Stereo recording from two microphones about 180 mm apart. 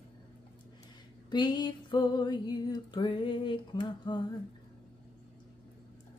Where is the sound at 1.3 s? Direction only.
25° left (ahead or behind).